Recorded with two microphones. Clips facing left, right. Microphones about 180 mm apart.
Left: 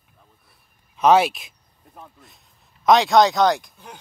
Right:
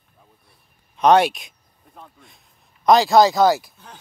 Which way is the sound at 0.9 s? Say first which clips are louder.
Right 1 dB; 5° left (ahead or behind).